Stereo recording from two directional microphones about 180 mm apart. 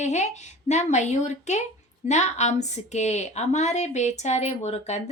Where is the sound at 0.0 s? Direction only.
40° left (ahead or behind).